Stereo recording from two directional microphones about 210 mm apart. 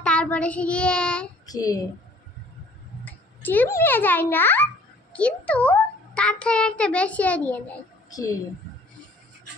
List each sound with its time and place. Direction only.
0.0 s child singing: 5° left (ahead or behind)
1.4 s a child's voice: 15° left (ahead or behind)
3.1 s a child's voice: 10° left (ahead or behind)